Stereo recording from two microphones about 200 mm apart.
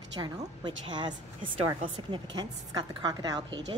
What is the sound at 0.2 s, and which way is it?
A woman's voice, 25° right (ahead or behind).